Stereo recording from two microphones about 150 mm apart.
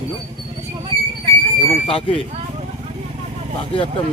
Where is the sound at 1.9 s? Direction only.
35° left (ahead or behind).